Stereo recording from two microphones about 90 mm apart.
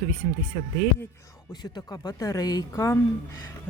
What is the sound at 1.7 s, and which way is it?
Speech, 50° left (ahead or behind).